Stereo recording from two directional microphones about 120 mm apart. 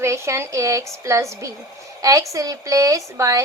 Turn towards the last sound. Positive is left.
turn(degrees=-30)  # may be behind; listen again after turning